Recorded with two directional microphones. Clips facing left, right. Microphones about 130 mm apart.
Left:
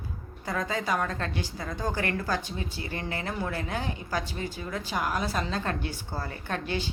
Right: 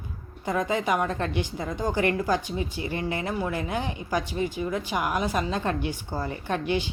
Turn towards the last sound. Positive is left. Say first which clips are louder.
# right 5 dB
turn(degrees=-15)  # may be behind; listen again after turning